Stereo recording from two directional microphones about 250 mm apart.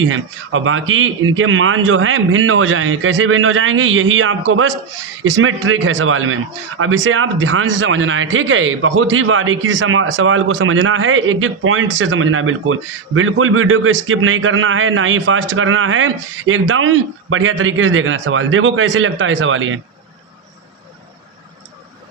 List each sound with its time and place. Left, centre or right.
0.0 s a man's voice: right